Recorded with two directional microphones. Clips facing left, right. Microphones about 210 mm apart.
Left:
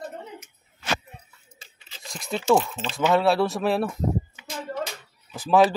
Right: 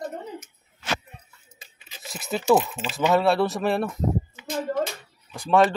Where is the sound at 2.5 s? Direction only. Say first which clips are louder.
Right 1 dB; 20° right (ahead or behind).